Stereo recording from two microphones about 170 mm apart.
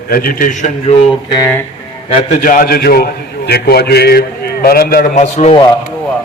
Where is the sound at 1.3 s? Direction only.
20° left (ahead or behind).